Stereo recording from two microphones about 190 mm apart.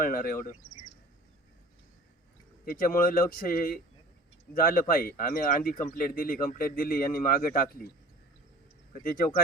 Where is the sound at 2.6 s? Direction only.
50° left (ahead or behind).